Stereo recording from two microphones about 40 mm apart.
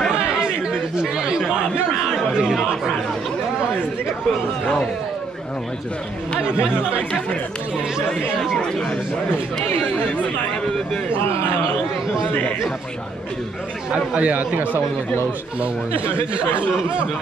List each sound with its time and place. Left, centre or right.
0.1 s chatter: right
6.4 s speech: right
13.9 s speech: right